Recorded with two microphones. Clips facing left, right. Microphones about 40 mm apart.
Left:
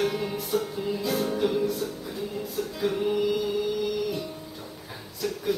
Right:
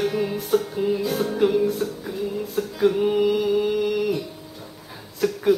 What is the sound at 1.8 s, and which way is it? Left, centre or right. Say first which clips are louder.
Music: right 5 dB; centre.